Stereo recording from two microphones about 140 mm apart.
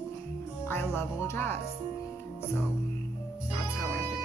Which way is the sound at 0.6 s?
15° left (ahead or behind).